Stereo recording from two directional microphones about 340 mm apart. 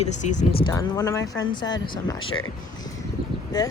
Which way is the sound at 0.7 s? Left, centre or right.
Centre.